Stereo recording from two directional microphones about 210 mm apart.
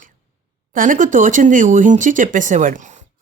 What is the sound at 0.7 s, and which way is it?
Speech, 40° right (ahead or behind).